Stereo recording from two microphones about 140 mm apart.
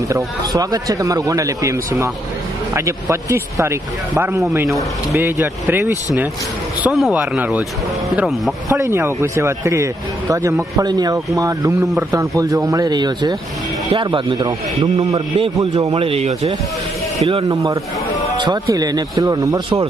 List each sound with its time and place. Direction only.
0.1 s speech: 25° right (ahead or behind)
6.8 s speech: 5° right (ahead or behind)
8.7 s speech: 20° right (ahead or behind)
15.9 s speech: 45° right (ahead or behind)
17.5 s speech: 25° right (ahead or behind)